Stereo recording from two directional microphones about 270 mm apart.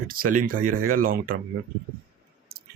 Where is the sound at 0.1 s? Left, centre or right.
Right.